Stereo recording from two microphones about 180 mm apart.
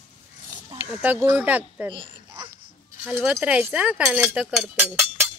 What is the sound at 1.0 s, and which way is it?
Speech, 10° right (ahead or behind).